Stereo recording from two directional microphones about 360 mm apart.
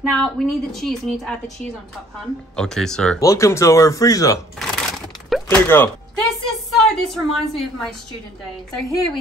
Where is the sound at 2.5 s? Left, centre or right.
Centre.